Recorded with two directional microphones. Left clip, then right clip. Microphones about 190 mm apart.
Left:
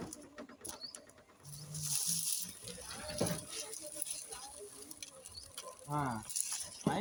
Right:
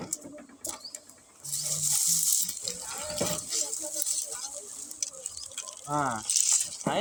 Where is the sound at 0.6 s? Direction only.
15° right (ahead or behind).